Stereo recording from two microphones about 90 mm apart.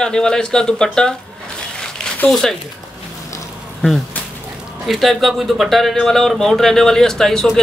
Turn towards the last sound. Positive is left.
turn(degrees=5)  # may be behind; listen again after turning